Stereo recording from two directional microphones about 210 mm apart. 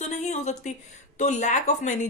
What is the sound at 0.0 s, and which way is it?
Speech, 35° left (ahead or behind).